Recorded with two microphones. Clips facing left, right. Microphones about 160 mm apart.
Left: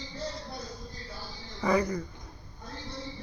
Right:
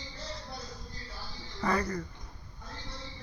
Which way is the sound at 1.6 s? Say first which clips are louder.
Left 4 dB; 15° left (ahead or behind).